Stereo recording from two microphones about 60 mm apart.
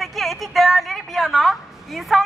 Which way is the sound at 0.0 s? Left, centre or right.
Centre.